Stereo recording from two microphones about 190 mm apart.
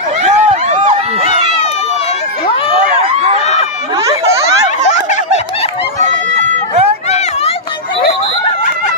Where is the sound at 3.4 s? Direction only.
35° left (ahead or behind).